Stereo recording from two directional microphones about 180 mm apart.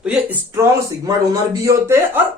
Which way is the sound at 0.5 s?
15° right (ahead or behind).